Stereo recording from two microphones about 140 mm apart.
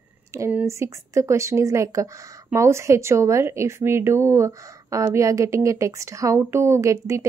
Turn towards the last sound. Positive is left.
turn(degrees=-20)  # may be behind; listen again after turning